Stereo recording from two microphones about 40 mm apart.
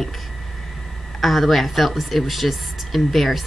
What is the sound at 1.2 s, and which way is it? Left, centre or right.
Speech, centre.